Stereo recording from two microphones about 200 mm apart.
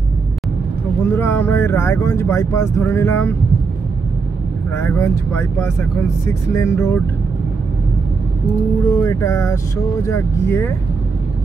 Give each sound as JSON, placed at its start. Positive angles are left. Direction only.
{"t": 1.0, "sound": "speech", "side_deg": 10}
{"t": 4.7, "sound": "speech", "side_deg": 10}
{"t": 9.0, "sound": "speech", "side_deg": 15}